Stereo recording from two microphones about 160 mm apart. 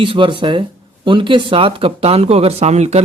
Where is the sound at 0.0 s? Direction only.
30° right (ahead or behind).